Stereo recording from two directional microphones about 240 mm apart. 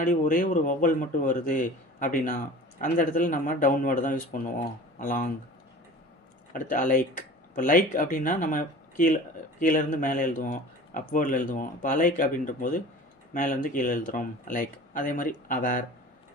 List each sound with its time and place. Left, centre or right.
0.0 s speech: left
6.5 s speech: left